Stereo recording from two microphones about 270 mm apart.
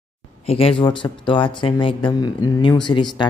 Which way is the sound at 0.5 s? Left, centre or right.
Left.